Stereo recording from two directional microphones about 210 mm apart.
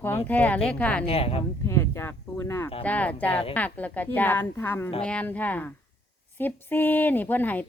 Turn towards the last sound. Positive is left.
turn(degrees=10)  # may be behind; listen again after turning